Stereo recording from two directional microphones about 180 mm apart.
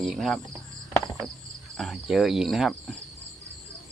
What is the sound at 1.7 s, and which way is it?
Speech, centre (ahead or behind).